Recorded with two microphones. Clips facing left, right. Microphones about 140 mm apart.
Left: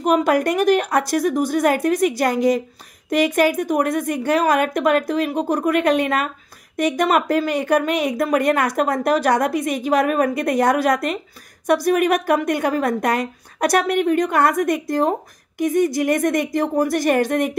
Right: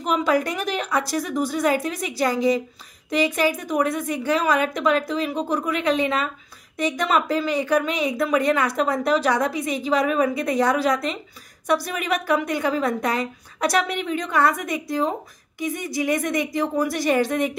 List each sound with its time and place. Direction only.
0.0 s a woman's voice: 50° left (ahead or behind)